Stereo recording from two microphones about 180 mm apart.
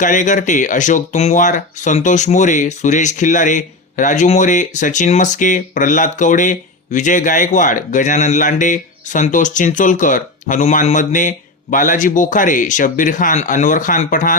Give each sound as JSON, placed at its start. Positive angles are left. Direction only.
{"t": 0.0, "sound": "speech", "side_deg": 45}